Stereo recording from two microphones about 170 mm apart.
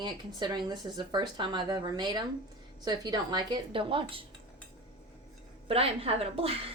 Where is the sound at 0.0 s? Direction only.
25° right (ahead or behind).